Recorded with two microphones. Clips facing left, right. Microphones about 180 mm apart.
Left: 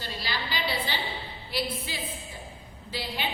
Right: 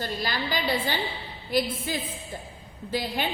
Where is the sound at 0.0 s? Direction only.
45° right (ahead or behind).